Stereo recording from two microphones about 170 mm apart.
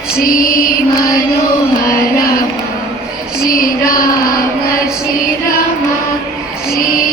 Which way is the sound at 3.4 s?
55° left (ahead or behind).